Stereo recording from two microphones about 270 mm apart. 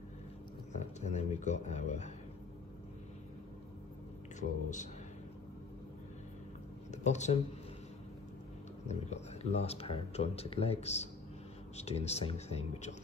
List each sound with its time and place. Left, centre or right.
1.0 s speech: left
4.4 s speech: left
6.9 s speech: left
8.8 s speech: left